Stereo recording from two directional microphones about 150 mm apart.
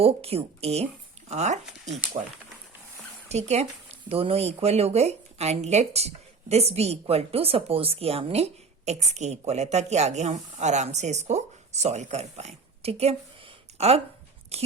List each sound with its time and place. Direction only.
0.0 s speech: 40° right (ahead or behind)
3.3 s speech: 45° right (ahead or behind)